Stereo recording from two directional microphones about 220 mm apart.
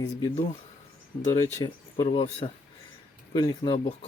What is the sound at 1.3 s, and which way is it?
Speech, 15° left (ahead or behind).